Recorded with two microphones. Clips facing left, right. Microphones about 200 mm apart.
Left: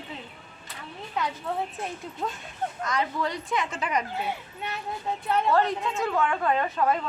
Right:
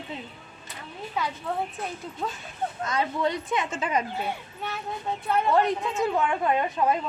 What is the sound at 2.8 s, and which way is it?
Speech, 25° right (ahead or behind).